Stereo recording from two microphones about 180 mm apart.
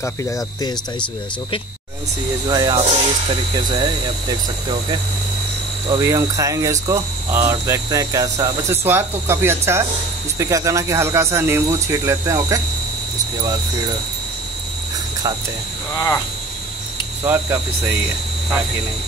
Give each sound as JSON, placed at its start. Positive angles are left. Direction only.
{"t": 0.0, "sound": "speech", "side_deg": 15}
{"t": 2.4, "sound": "speech", "side_deg": -25}
{"t": 5.9, "sound": "speech", "side_deg": -20}
{"t": 17.2, "sound": "speech", "side_deg": -15}